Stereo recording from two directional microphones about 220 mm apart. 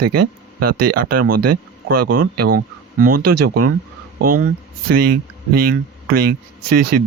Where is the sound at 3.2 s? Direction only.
90° right.